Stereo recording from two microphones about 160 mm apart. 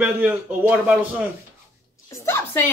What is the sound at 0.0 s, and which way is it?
Speech, 10° right (ahead or behind).